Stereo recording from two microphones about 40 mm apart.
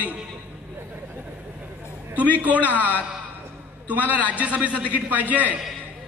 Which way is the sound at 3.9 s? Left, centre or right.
Right.